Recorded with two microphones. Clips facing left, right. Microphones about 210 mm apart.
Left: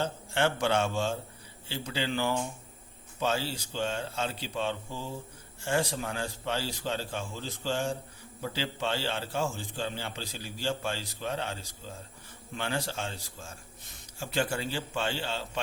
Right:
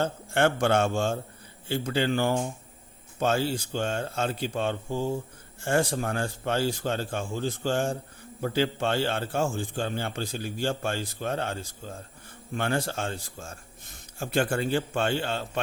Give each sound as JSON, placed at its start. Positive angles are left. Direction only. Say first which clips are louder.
{"t": 0.0, "sound": "a man's voice", "louder": "right 4 dB", "side_deg": -55}